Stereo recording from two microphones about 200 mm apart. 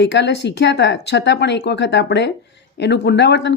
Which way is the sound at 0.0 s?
60° left (ahead or behind).